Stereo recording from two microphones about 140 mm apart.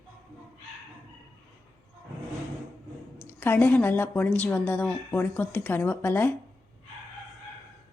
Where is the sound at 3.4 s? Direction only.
15° left (ahead or behind).